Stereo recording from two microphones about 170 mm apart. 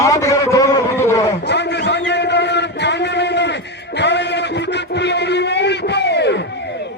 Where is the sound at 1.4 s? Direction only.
90° left.